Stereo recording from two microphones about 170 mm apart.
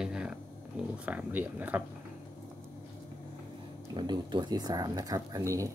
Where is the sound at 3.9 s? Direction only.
25° right (ahead or behind).